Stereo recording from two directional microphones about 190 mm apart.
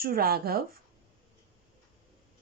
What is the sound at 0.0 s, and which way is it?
Speech, 50° right (ahead or behind).